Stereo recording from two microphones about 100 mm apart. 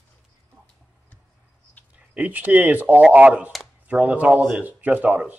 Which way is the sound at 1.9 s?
15° right (ahead or behind).